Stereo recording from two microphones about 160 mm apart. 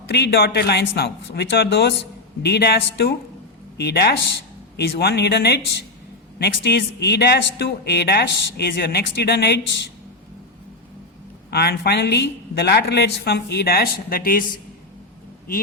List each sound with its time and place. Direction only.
0.1 s speech: 90° left
11.5 s speech: 85° left; by 14.4 s 65° left (ahead or behind)